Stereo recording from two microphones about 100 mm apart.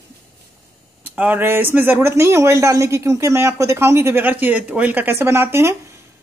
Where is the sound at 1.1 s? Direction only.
15° right (ahead or behind).